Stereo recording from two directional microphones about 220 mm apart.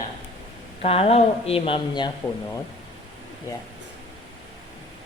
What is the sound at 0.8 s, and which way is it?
Speech, 25° left (ahead or behind).